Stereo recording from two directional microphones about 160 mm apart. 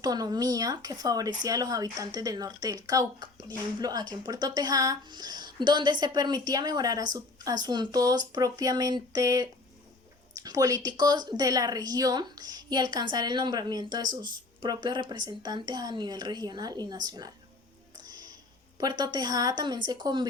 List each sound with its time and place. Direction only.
0.0 s a woman's voice: 25° right (ahead or behind)
18.8 s a woman's voice: 25° right (ahead or behind)